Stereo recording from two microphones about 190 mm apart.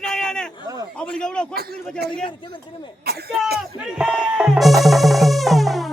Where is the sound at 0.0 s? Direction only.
5° left (ahead or behind).